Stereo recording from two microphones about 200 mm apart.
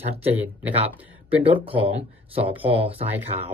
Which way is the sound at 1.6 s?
25° right (ahead or behind).